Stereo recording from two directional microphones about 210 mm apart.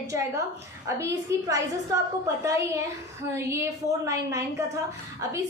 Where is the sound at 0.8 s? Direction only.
15° right (ahead or behind).